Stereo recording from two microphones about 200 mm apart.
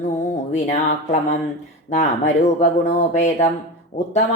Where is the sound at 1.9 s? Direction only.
35° left (ahead or behind).